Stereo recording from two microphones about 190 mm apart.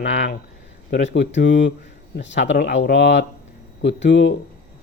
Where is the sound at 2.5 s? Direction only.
55° left (ahead or behind).